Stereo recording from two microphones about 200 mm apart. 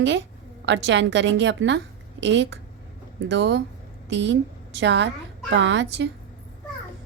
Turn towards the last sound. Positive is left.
turn(degrees=-60)  # may be behind; listen again after turning